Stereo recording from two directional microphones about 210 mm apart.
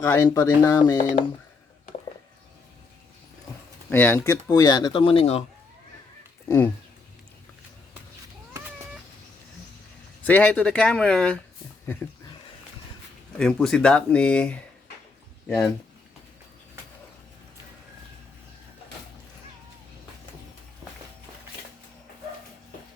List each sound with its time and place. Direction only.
0.0 s speech: 10° left (ahead or behind)
3.8 s speech: 10° left (ahead or behind); by 5.4 s 25° left (ahead or behind)
10.2 s speech: 5° left (ahead or behind)
13.4 s speech: 5° left (ahead or behind)